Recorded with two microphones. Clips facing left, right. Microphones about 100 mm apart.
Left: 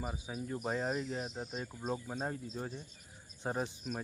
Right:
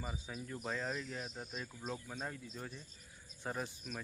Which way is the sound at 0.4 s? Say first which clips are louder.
Left 5 dB; 30° left (ahead or behind).